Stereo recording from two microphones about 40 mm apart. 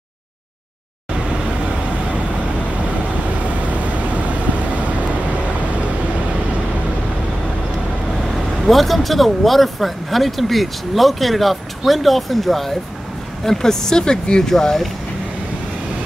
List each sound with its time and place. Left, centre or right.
3.4 s vehicle: right
8.2 s speech: centre
14.5 s speech: centre